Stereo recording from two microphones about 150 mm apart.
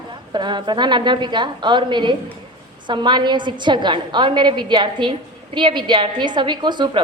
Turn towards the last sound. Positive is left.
turn(degrees=-30)  # may be behind; listen again after turning